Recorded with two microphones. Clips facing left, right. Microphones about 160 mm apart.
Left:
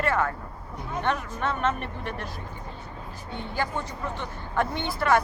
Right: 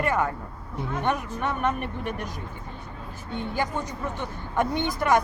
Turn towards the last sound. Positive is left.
turn(degrees=-15)  # may be behind; listen again after turning